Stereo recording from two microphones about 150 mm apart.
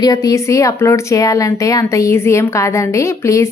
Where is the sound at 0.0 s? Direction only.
25° left (ahead or behind).